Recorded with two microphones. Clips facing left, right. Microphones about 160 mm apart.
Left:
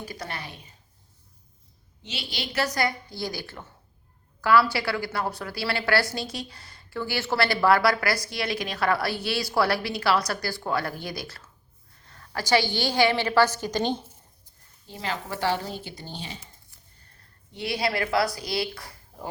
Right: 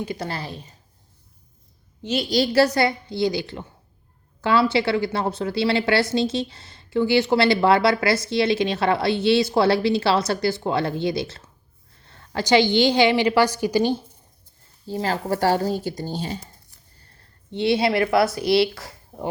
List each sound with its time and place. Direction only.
0.0 s a woman's voice: 25° right (ahead or behind)
2.0 s a woman's voice: 40° right (ahead or behind); by 14.0 s 10° right (ahead or behind)
14.8 s speech: 35° right (ahead or behind)
17.5 s a woman's voice: 25° right (ahead or behind)
18.8 s a sound: 25° right (ahead or behind)